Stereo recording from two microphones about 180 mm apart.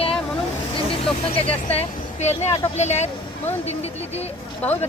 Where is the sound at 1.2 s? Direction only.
35° left (ahead or behind).